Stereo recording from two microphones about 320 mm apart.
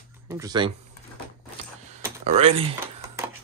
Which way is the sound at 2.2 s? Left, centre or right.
Centre.